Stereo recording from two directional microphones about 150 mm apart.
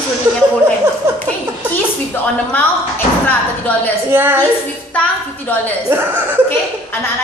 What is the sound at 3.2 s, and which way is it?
Speech, 10° left (ahead or behind).